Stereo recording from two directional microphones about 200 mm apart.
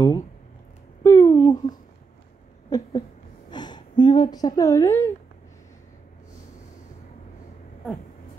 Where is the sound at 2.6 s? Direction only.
20° left (ahead or behind).